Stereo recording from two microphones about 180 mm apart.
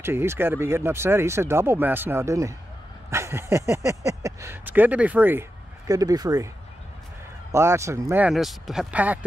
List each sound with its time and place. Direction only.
0.0 s speech: 15° right (ahead or behind)
3.1 s a sound: 15° right (ahead or behind)
4.0 s speech: 20° right (ahead or behind)
7.5 s speech: 15° right (ahead or behind)